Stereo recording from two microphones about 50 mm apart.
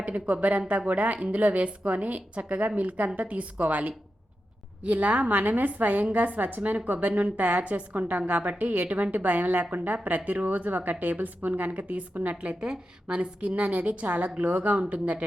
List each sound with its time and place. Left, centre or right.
0.0 s a woman's voice: right